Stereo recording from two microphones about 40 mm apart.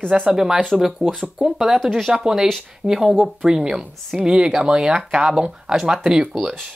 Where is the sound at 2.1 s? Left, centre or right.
Centre.